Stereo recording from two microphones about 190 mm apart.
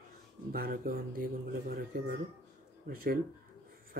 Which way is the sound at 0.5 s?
50° right (ahead or behind).